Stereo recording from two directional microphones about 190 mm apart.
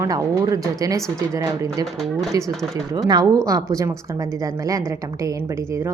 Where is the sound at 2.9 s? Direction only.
20° right (ahead or behind).